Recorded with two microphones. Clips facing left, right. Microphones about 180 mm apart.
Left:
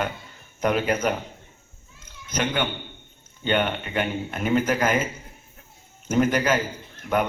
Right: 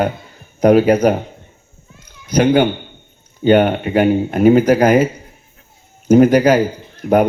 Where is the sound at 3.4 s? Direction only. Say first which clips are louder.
Right 12 dB; 40° right (ahead or behind).